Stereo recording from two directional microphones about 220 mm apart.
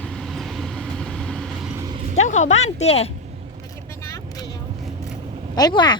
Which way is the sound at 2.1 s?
35° left (ahead or behind).